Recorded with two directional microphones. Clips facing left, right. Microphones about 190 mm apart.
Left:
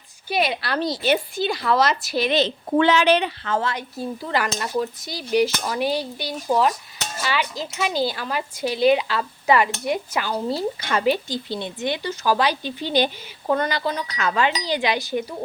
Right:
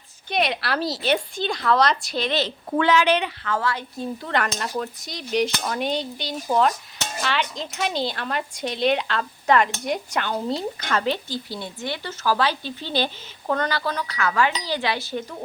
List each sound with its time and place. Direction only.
0.3 s a woman's voice: 5° left (ahead or behind)
2.4 s a woman's voice: 25° left (ahead or behind)
4.2 s a woman's voice: 5° left (ahead or behind)
11.4 s speech: 20° left (ahead or behind)